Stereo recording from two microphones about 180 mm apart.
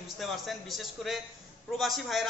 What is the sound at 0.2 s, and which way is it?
Speech, centre (ahead or behind).